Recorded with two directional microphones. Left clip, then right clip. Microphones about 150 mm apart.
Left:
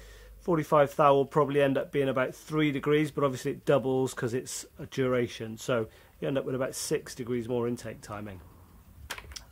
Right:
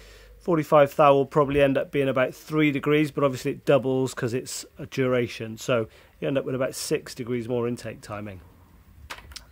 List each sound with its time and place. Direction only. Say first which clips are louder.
0.5 s speech: right 5 dB; 30° right (ahead or behind)